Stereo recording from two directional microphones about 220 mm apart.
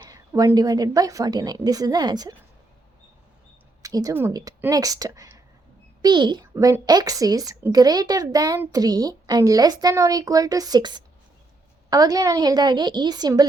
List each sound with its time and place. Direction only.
0.1 s a child's voice: 15° right (ahead or behind)
3.8 s a child's voice: 15° right (ahead or behind)